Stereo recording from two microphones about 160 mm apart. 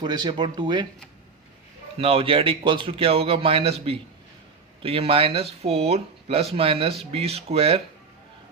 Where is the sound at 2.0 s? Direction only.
35° right (ahead or behind).